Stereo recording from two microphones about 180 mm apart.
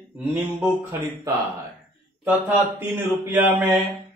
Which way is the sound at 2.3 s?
10° right (ahead or behind).